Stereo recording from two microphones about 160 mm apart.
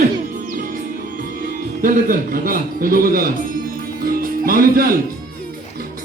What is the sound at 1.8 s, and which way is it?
A man's voice, 60° right (ahead or behind).